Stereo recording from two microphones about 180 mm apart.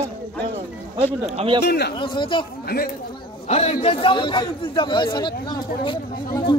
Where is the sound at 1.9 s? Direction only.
25° left (ahead or behind).